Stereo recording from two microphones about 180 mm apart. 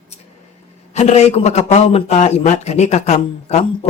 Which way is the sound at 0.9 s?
40° left (ahead or behind).